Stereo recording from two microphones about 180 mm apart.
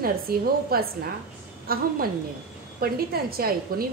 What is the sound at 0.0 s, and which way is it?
A woman's voice, 55° right (ahead or behind).